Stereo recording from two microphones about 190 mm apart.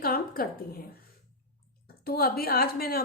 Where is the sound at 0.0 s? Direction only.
50° left (ahead or behind).